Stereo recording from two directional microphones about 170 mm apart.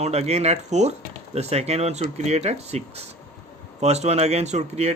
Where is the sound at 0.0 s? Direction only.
40° right (ahead or behind).